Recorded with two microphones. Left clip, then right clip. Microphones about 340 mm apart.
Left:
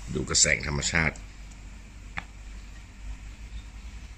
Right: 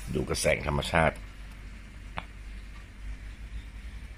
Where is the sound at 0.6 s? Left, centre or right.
Centre.